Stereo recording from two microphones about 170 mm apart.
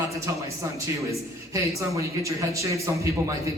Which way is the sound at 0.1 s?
15° right (ahead or behind).